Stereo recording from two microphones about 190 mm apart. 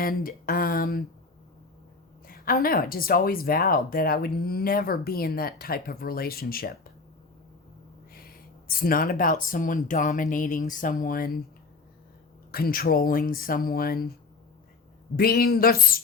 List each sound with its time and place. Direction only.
0.0 s speech: 50° left (ahead or behind)
2.2 s speech: 50° left (ahead or behind)
8.1 s speech: 50° left (ahead or behind)
12.5 s speech: 50° left (ahead or behind)
15.1 s speech: 50° left (ahead or behind)